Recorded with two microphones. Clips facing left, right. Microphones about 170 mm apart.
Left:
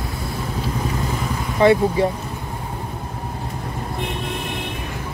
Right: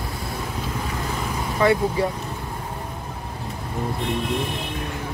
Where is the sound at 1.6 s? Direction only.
25° left (ahead or behind).